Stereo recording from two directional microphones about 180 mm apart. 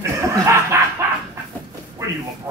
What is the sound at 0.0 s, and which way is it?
Chuckle, 15° right (ahead or behind).